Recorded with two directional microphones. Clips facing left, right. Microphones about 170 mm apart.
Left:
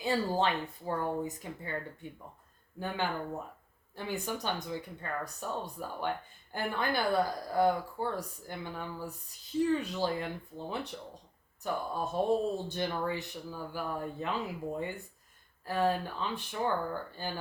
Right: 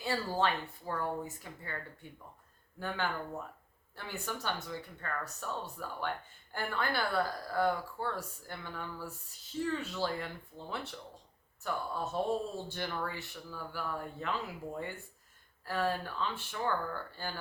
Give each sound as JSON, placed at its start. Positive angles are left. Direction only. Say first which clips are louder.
{"t": 0.0, "sound": "speech", "louder": "left 3 dB", "side_deg": 20}